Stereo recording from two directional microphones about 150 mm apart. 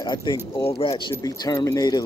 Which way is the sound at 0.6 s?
40° left (ahead or behind).